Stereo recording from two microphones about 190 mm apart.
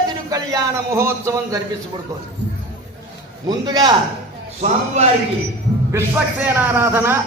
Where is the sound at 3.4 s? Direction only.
20° right (ahead or behind).